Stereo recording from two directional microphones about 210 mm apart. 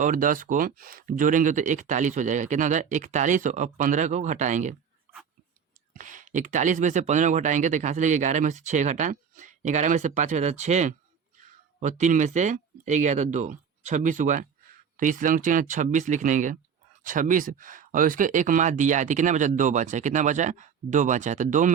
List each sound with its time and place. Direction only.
0.0 s speech: 40° right (ahead or behind)
5.9 s speech: 40° right (ahead or behind)